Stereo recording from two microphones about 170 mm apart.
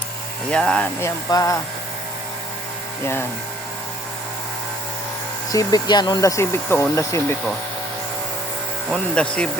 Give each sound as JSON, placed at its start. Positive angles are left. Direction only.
{"t": 0.5, "sound": "speech", "side_deg": 5}
{"t": 0.9, "sound": "speech", "side_deg": 20}
{"t": 5.5, "sound": "speech", "side_deg": 20}
{"t": 8.9, "sound": "speech", "side_deg": 5}